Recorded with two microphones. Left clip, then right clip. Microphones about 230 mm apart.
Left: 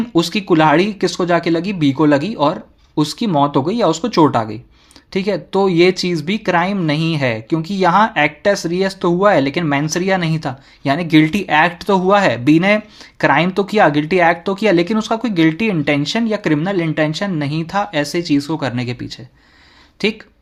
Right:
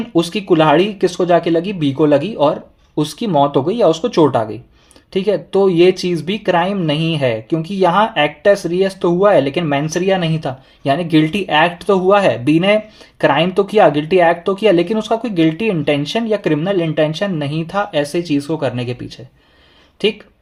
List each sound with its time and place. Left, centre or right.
0.2 s speech: left